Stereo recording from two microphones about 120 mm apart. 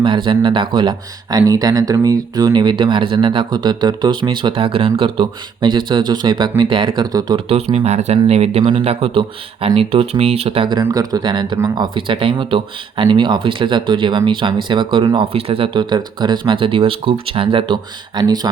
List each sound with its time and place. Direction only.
0.0 s speech: 45° right (ahead or behind)
7.3 s speech: 50° right (ahead or behind)
10.9 s speech: 35° right (ahead or behind)